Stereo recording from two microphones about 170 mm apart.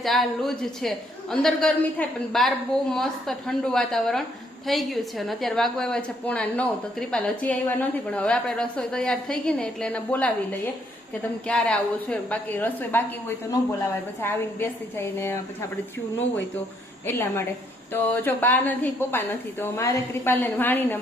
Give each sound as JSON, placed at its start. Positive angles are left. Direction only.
{"t": 0.0, "sound": "a woman's voice", "side_deg": 0}
{"t": 11.4, "sound": "a woman's voice", "side_deg": 5}
{"t": 17.1, "sound": "a woman's voice", "side_deg": 15}